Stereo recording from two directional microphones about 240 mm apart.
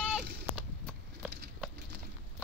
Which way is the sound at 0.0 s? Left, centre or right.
Centre.